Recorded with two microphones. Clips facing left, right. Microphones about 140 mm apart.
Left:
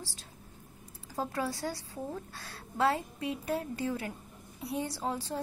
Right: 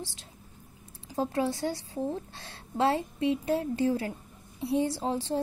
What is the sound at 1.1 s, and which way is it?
A woman's voice, 25° right (ahead or behind).